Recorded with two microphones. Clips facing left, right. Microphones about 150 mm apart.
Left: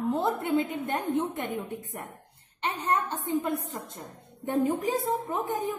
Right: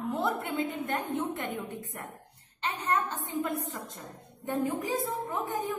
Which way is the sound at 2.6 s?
25° left (ahead or behind).